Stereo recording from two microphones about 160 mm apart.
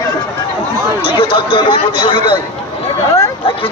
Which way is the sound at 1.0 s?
30° left (ahead or behind).